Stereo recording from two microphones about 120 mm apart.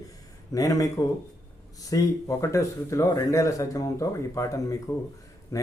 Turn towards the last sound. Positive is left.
turn(degrees=25)  # may be behind; listen again after turning